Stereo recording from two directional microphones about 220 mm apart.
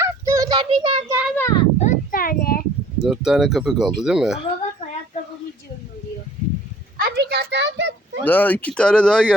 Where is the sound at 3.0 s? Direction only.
Centre (ahead or behind).